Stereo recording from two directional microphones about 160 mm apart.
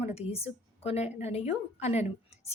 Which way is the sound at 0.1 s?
40° left (ahead or behind).